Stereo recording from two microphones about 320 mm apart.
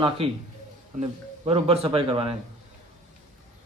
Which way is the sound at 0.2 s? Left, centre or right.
Centre.